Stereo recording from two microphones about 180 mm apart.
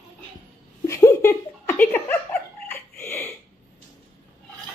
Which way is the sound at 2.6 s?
15° left (ahead or behind).